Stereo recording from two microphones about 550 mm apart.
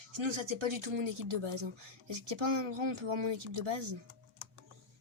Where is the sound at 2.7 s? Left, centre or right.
Right.